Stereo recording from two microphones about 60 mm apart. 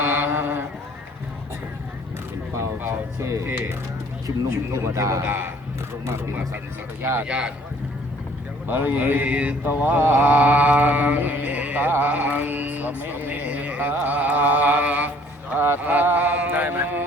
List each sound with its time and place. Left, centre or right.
0.0 s a sound: right
2.6 s speech: right
4.7 s a man's voice: right
7.0 s speech: right
7.3 s speech: centre
8.6 s mantra: right
12.9 s speech: right
15.5 s speech: right
15.9 s music: right